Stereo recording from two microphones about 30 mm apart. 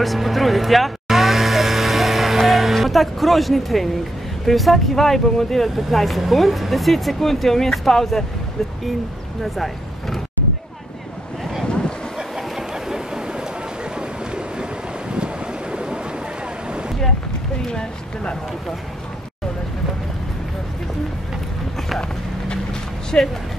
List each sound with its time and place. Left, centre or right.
0.0 s vehicle: centre
4.5 s speech: centre
9.4 s speech: centre
12.4 s a sound: centre
13.9 s vehicle: right
23.1 s speech: left